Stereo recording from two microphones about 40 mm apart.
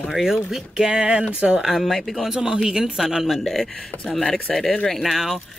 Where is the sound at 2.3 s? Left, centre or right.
Centre.